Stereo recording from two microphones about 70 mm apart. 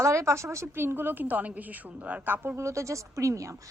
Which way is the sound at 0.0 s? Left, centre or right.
Right.